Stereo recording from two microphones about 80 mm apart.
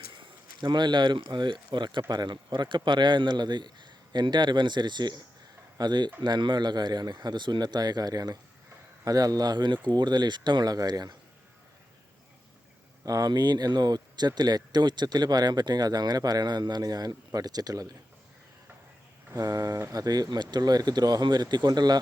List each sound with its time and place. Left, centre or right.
0.1 s a sound: right
1.3 s a man's voice: right
13.1 s speech: right
19.4 s speech: right